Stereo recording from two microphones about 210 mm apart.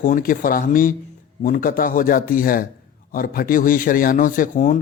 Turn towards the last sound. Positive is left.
turn(degrees=40)  # may be behind; listen again after turning